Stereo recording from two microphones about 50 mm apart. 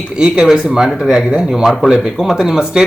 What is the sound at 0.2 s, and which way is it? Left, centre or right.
A man's voice, centre.